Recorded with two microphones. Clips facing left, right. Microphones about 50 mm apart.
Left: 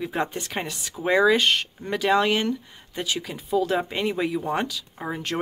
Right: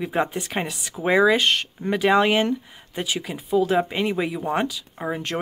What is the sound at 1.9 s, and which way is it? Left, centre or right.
Speech, centre.